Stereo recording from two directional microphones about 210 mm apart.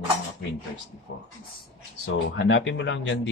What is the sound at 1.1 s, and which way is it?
Speech, 50° left (ahead or behind).